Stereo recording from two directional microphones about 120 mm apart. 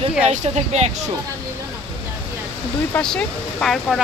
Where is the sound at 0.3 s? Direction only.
65° right (ahead or behind).